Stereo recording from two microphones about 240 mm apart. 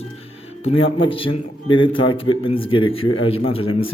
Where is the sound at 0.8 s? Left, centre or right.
Left.